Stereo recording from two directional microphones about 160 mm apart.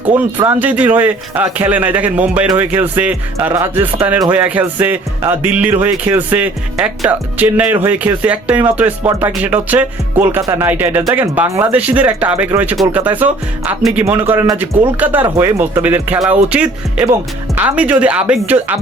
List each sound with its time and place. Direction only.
0.0 s speech: 10° right (ahead or behind)
0.4 s music: 10° right (ahead or behind)